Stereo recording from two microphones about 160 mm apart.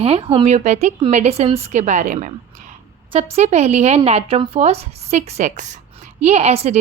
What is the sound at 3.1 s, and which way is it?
Speech, 40° right (ahead or behind).